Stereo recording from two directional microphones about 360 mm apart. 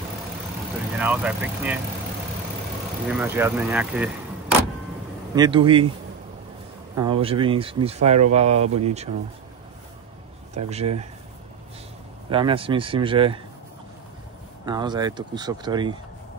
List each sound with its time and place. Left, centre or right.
0.9 s speech: centre
3.1 s speech: centre
7.0 s speech: centre
10.7 s speech: centre
12.3 s speech: centre
14.7 s speech: centre